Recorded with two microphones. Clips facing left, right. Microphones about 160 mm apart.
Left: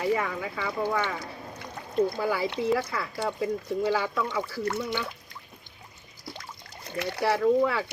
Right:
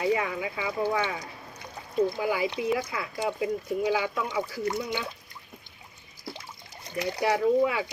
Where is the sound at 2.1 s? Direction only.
15° right (ahead or behind).